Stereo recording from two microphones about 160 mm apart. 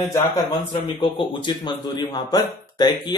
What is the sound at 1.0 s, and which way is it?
Speech, 25° left (ahead or behind).